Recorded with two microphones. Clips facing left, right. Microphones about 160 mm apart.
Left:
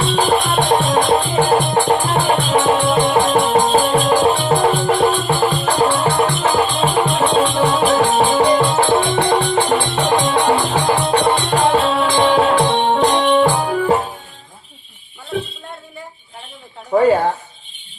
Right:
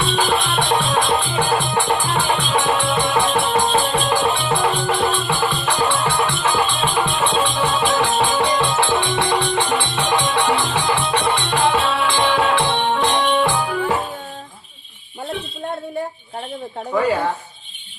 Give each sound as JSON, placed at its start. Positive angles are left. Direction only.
{"t": 0.2, "sound": "music", "side_deg": 40}